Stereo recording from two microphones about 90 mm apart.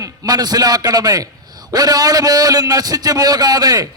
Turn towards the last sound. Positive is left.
turn(degrees=-45)  # may be behind; listen again after turning